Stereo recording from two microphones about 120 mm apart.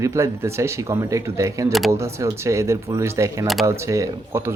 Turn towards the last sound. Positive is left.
turn(degrees=-20)  # may be behind; listen again after turning